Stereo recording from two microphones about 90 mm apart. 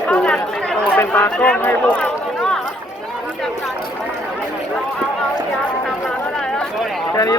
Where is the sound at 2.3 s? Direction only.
5° left (ahead or behind).